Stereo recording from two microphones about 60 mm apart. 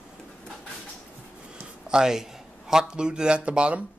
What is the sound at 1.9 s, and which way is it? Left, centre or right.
Speech, centre.